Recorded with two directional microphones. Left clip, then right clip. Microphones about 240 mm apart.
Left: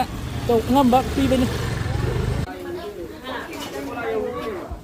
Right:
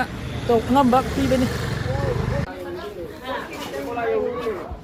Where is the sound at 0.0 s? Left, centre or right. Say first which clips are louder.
Left 1 dB; left.